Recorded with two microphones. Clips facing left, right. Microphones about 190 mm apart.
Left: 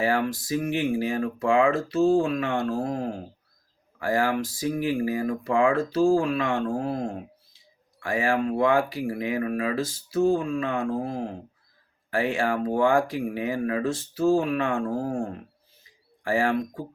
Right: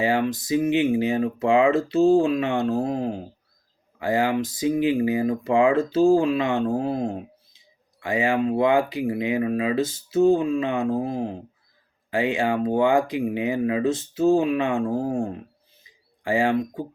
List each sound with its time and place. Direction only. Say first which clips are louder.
0.0 s speech: right 2 dB; 20° right (ahead or behind)